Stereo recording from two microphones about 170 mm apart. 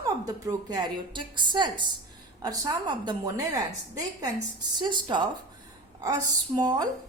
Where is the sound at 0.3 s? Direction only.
20° right (ahead or behind).